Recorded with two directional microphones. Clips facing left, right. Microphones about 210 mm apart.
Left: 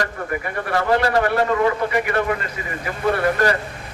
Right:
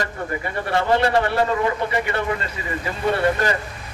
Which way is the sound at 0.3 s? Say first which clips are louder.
Left 1 dB; 25° right (ahead or behind).